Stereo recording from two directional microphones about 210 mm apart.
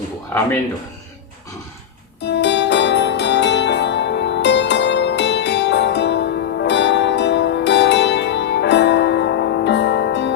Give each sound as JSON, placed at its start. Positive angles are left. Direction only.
{"t": 2.2, "sound": "music", "side_deg": 55}